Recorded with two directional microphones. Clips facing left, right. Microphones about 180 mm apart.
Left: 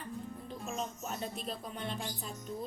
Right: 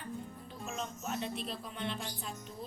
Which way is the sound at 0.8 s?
40° left (ahead or behind).